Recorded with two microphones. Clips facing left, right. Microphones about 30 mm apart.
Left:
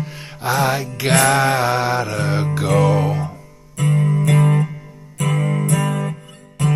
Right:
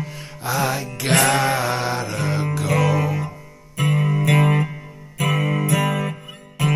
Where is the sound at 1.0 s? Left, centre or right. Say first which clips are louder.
Left 3 dB; centre.